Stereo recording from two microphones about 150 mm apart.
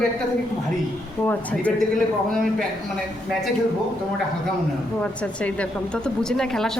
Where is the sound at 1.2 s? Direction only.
10° left (ahead or behind).